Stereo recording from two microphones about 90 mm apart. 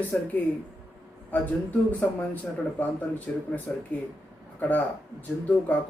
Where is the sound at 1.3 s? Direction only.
20° left (ahead or behind).